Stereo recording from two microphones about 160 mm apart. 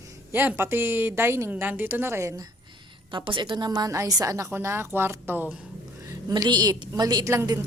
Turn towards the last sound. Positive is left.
turn(degrees=-15)  # may be behind; listen again after turning